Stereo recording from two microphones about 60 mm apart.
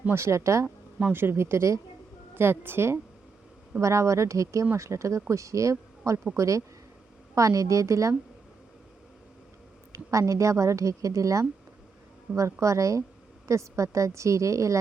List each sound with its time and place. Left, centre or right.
0.1 s a woman's voice: right
1.1 s speech: right
2.3 s speech: right
3.8 s a woman's voice: right
9.9 s a woman's voice: right